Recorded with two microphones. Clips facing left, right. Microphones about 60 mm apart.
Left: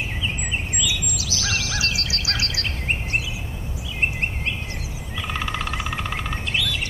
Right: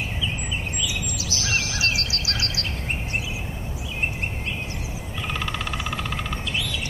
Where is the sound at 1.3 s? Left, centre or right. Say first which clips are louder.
Even; right.